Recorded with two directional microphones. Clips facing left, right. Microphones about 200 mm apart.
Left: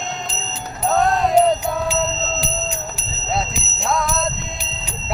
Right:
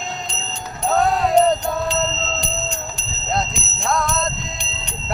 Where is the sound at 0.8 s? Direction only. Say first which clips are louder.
Even; centre (ahead or behind).